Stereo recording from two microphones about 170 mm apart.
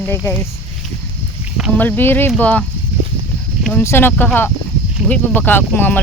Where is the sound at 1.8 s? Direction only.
10° left (ahead or behind).